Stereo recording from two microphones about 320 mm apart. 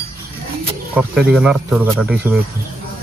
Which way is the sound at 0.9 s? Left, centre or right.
Centre.